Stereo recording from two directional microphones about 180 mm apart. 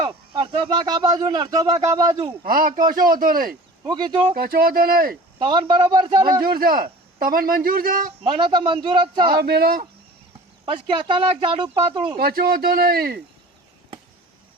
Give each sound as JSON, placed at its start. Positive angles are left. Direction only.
{"t": 0.0, "sound": "speech", "side_deg": -30}
{"t": 2.4, "sound": "a man's voice", "side_deg": -50}
{"t": 3.8, "sound": "speech", "side_deg": -25}
{"t": 4.4, "sound": "speech", "side_deg": -55}
{"t": 5.4, "sound": "speech", "side_deg": -25}
{"t": 6.4, "sound": "a man's voice", "side_deg": -55}
{"t": 8.2, "sound": "speech", "side_deg": -30}
{"t": 9.3, "sound": "speech", "side_deg": -60}
{"t": 10.7, "sound": "speech", "side_deg": -25}
{"t": 12.1, "sound": "speech", "side_deg": -60}